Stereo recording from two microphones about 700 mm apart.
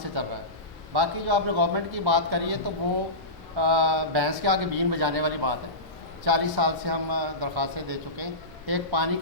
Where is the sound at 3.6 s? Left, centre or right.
Right.